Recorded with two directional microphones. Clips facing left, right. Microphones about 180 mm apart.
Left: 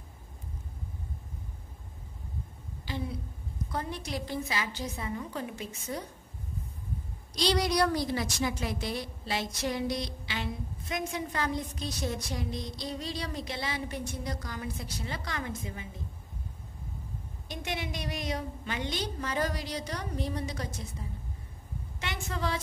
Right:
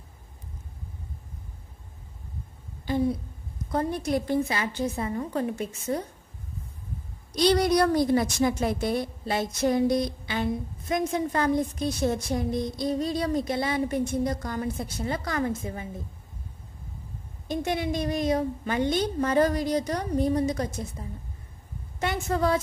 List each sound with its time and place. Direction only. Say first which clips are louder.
2.8 s a woman's voice: right 11 dB; 50° right (ahead or behind)
7.3 s a woman's voice: right 6 dB; 55° right (ahead or behind)
17.5 s a woman's voice: right 9 dB; 50° right (ahead or behind)
22.0 s a woman's voice: right 9 dB; 50° right (ahead or behind)